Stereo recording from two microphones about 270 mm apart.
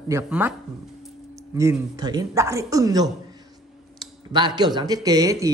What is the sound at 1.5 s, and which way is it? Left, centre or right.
Speech, centre.